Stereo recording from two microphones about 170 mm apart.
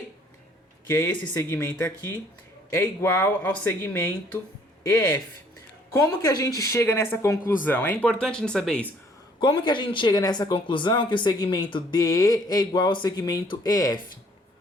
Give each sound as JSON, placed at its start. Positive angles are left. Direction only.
{"t": 0.9, "sound": "speech", "side_deg": 15}
{"t": 3.0, "sound": "speech", "side_deg": 15}
{"t": 4.8, "sound": "speech", "side_deg": 10}
{"t": 9.4, "sound": "speech", "side_deg": 30}